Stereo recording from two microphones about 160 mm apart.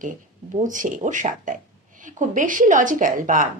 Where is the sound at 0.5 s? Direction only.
55° right (ahead or behind).